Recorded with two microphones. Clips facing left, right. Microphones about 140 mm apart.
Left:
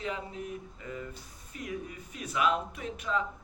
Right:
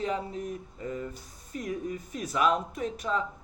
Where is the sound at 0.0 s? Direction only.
40° right (ahead or behind).